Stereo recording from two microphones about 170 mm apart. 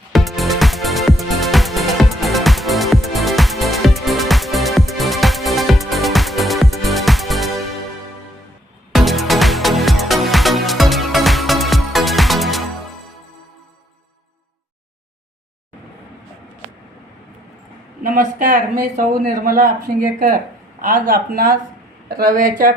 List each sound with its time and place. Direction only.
0.1 s music: centre (ahead or behind)
8.9 s music: centre (ahead or behind)
18.0 s a woman's voice: 55° right (ahead or behind)